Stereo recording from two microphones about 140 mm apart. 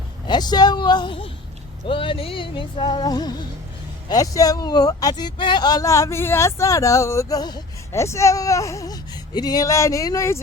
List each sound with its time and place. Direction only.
0.3 s speech: 30° left (ahead or behind)